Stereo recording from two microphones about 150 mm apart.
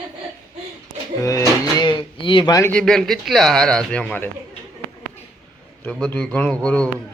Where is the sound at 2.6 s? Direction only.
5° left (ahead or behind).